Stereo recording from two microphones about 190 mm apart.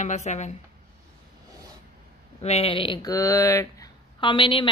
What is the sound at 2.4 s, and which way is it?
Speech, 35° left (ahead or behind).